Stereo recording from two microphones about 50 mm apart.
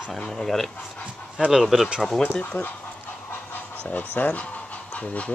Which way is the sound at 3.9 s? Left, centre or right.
Left.